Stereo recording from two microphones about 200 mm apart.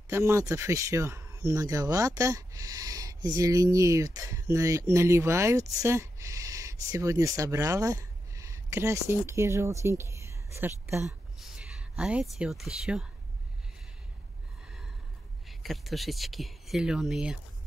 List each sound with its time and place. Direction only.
0.1 s speech: 15° right (ahead or behind)
11.1 s speech: centre (ahead or behind)
15.4 s speech: centre (ahead or behind)